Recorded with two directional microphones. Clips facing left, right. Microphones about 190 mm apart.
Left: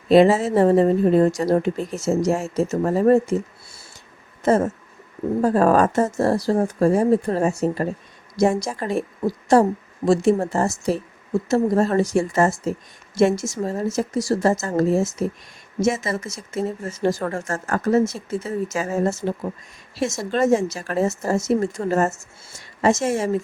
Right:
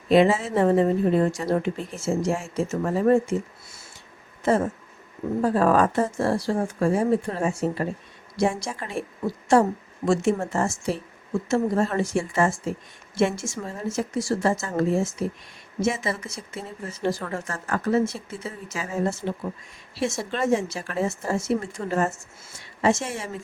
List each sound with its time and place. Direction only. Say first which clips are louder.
0.1 s a woman's voice: left 4 dB; 40° left (ahead or behind)